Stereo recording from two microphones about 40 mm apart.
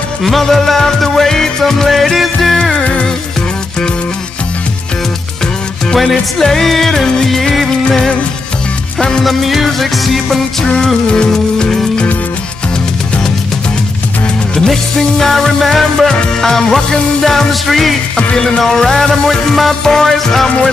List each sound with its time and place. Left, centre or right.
0.2 s music: centre
2.8 s music: left
5.9 s music: centre
9.2 s music: centre
10.6 s music: left
14.7 s music: centre
19.8 s music: centre